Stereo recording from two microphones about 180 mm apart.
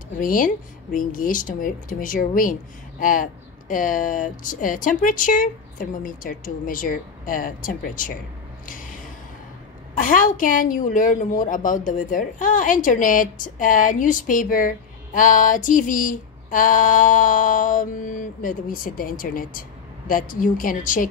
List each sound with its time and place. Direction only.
0.2 s a woman's voice: 50° left (ahead or behind)
8.6 s a sound: 50° left (ahead or behind)
9.9 s a woman's voice: 50° left (ahead or behind)